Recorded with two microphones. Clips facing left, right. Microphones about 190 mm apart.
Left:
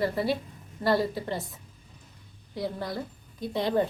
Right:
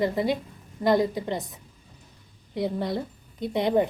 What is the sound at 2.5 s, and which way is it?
A woman's voice, 20° right (ahead or behind).